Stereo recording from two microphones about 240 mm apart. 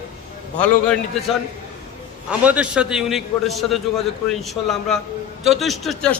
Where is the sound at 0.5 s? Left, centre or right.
Centre.